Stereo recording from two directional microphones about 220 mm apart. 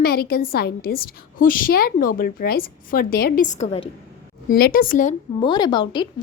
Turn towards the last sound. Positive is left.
turn(degrees=20)  # may be behind; listen again after turning